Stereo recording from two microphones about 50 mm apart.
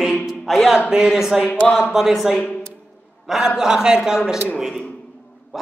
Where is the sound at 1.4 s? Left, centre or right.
Left.